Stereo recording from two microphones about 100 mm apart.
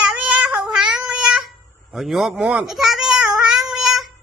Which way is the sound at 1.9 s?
5° right (ahead or behind).